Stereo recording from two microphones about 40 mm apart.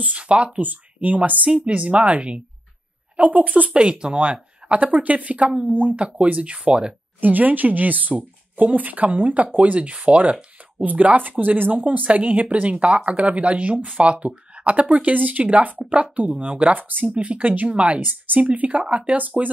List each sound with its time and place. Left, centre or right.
0.0 s speech: right
0.6 s speech: right
3.2 s speech: right
5.7 s speech: right
5.9 s speech: right
7.2 s speech: right
14.0 s speech: right
18.0 s speech: right